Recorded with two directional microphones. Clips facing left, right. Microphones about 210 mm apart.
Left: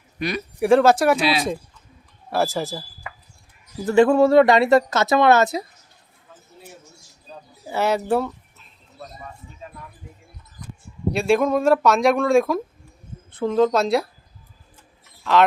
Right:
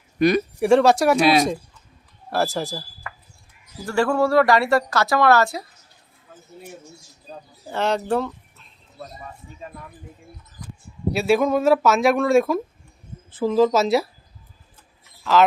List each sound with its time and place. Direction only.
0.2 s speech: 45° right (ahead or behind)
0.6 s speech: centre (ahead or behind)
1.2 s speech: 50° right (ahead or behind)
2.3 s speech: centre (ahead or behind)
3.8 s speech: 20° left (ahead or behind)
7.7 s speech: 10° left (ahead or behind)
11.1 s speech: 5° right (ahead or behind)
15.2 s speech: centre (ahead or behind)